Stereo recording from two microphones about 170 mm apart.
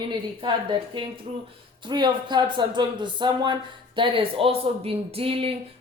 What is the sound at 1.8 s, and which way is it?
Speech, 25° right (ahead or behind).